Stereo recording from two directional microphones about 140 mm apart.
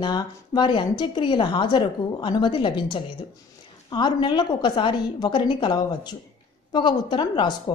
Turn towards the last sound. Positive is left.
turn(degrees=35)  # may be behind; listen again after turning